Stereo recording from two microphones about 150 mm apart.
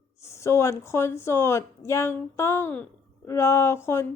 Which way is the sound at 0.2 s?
20° left (ahead or behind).